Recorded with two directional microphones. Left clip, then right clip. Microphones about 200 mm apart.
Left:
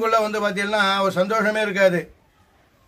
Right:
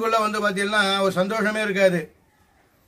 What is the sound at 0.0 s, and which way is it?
A man's voice, 15° left (ahead or behind).